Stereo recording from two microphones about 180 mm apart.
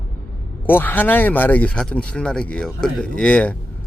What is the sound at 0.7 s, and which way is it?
Speech, 10° left (ahead or behind).